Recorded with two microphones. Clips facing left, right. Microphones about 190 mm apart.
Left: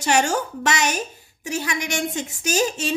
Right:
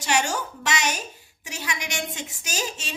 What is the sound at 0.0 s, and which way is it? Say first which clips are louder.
A woman's voice: left 5 dB; 50° left (ahead or behind).